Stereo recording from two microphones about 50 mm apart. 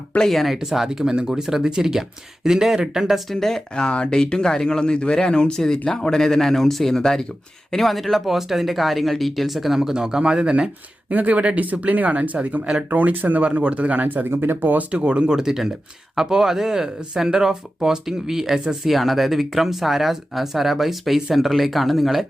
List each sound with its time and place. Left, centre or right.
0.2 s speech: centre
0.5 s speech: centre
3.4 s speech: centre
3.8 s speech: left
4.1 s speech: centre
11.1 s speech: right
14.3 s speech: right
14.9 s speech: right; by 22.3 s centre